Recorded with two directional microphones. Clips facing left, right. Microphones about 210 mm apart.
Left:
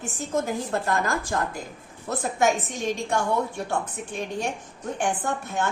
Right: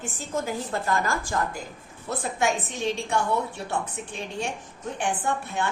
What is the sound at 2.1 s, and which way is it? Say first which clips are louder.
A woman's voice: left 3 dB; 45° left (ahead or behind).